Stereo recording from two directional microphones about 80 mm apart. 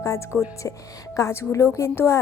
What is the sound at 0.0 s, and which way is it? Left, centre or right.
Speech, left.